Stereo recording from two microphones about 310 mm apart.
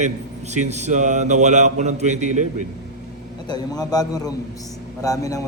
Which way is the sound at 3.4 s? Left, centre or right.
Centre.